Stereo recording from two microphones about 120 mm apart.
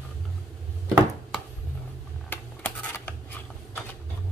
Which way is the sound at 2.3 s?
15° left (ahead or behind).